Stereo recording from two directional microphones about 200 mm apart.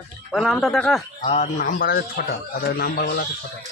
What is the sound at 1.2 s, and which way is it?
A man's voice, 35° left (ahead or behind).